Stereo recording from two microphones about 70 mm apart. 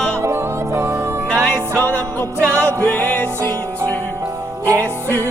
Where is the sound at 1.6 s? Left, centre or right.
Right.